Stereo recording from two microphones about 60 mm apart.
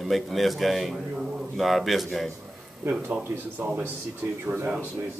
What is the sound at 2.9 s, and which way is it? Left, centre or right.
Speech, right.